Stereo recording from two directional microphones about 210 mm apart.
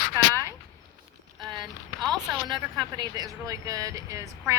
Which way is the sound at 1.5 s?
20° right (ahead or behind).